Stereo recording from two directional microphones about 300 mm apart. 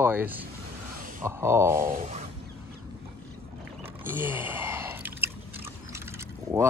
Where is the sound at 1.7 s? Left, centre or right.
Right.